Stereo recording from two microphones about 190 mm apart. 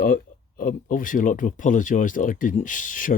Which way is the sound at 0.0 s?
50° left (ahead or behind).